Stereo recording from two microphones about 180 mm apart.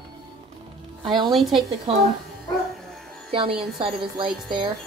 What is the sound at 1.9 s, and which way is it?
Speech, 35° right (ahead or behind).